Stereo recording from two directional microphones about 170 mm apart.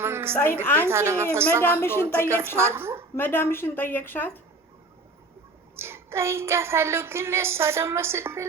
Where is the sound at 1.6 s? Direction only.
15° left (ahead or behind).